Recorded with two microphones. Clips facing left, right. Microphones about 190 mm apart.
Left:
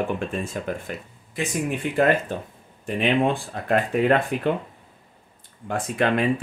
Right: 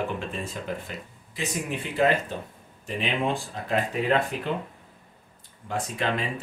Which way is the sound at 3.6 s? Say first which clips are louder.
Left 8 dB; 55° left (ahead or behind).